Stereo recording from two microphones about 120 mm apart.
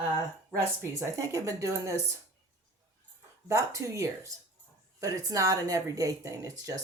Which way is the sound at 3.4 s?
25° right (ahead or behind).